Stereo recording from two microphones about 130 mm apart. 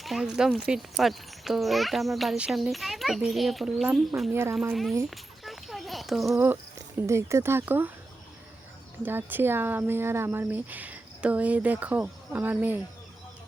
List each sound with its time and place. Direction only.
0.0 s a child's voice: centre (ahead or behind)
4.3 s speech: 20° right (ahead or behind)
4.7 s a child's voice: centre (ahead or behind)
5.1 s a sound: centre (ahead or behind)
6.3 s speech: 20° right (ahead or behind)
9.0 s speech: 15° right (ahead or behind)